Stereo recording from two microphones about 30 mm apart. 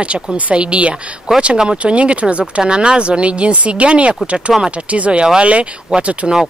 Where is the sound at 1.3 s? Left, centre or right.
Right.